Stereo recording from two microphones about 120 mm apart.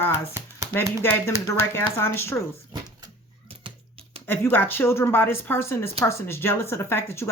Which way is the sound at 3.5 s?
50° right (ahead or behind).